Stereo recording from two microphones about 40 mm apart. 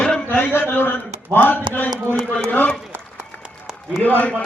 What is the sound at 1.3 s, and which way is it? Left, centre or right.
Speech, left.